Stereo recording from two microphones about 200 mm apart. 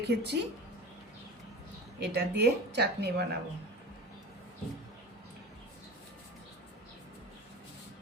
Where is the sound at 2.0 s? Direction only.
55° right (ahead or behind).